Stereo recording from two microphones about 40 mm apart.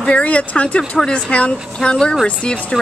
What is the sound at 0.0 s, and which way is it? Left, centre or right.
Speech, left.